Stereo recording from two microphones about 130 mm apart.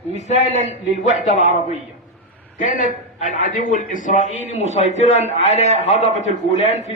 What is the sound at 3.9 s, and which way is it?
A man's voice, 70° left (ahead or behind).